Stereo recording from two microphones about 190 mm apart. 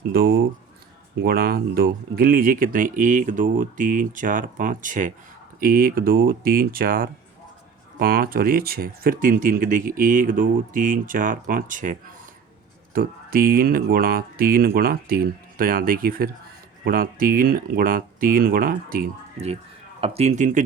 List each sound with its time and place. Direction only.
0.1 s speech: 55° right (ahead or behind)
20.0 s speech: 35° right (ahead or behind)